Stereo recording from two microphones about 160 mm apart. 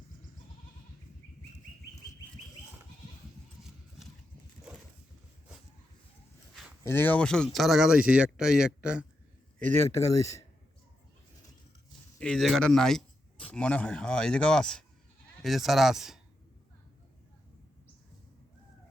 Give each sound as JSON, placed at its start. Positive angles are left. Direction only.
{"t": 3.6, "sound": "horse", "side_deg": 0}
{"t": 6.8, "sound": "speech", "side_deg": 15}
{"t": 9.9, "sound": "speech", "side_deg": 20}
{"t": 12.2, "sound": "speech", "side_deg": 0}